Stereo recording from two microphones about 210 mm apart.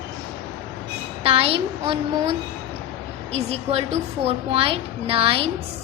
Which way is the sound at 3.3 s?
30° right (ahead or behind).